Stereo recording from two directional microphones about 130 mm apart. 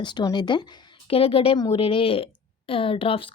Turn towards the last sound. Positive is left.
turn(degrees=45)  # may be behind; listen again after turning